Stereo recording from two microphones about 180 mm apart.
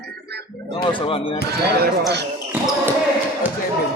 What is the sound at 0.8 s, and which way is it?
Speech, 30° left (ahead or behind).